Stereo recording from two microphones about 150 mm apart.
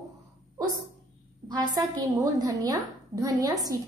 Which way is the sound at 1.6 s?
25° right (ahead or behind).